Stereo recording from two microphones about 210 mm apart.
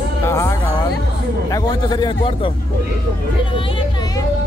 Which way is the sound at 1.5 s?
20° left (ahead or behind).